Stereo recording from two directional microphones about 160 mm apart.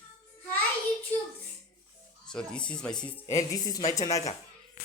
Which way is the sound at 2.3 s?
5° left (ahead or behind).